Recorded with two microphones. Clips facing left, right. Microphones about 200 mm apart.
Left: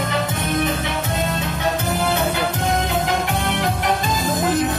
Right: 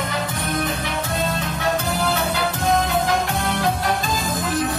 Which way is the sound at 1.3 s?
20° left (ahead or behind).